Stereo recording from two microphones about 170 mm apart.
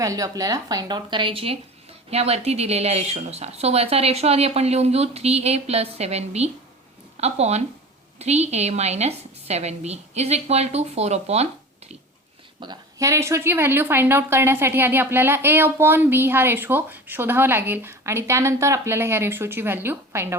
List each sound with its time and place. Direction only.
0.0 s speech: 20° right (ahead or behind); by 11.4 s 40° right (ahead or behind)
12.5 s a woman's voice: 25° right (ahead or behind)